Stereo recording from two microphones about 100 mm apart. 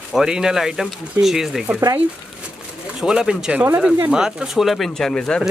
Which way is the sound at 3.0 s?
5° right (ahead or behind).